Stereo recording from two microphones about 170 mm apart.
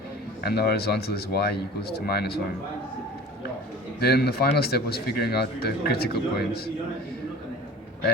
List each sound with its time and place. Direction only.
0.4 s a man's voice: 70° left (ahead or behind)
4.0 s a man's voice: 70° left (ahead or behind)